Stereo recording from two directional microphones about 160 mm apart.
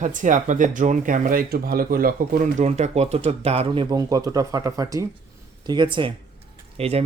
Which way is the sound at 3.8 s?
25° right (ahead or behind).